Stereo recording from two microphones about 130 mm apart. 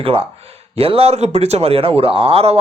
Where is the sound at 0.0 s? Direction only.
45° right (ahead or behind).